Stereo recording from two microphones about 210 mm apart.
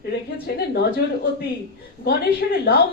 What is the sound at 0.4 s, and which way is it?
Speech, 50° left (ahead or behind).